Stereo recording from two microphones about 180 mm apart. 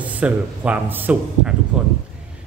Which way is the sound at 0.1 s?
10° right (ahead or behind).